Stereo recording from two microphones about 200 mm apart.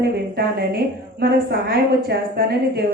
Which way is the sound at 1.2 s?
55° right (ahead or behind).